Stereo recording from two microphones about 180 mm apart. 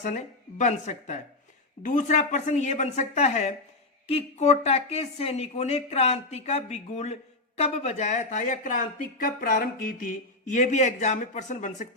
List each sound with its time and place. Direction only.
0.6 s speech: 40° left (ahead or behind)